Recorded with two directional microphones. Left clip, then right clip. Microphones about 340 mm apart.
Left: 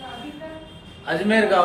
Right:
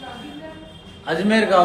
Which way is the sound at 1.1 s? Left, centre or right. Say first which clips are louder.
Right 1 dB; right.